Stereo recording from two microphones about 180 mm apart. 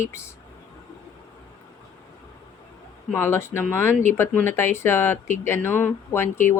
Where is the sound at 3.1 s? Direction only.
15° left (ahead or behind).